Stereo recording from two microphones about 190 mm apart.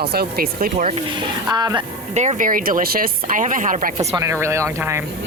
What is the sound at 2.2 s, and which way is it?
Speech, 40° right (ahead or behind).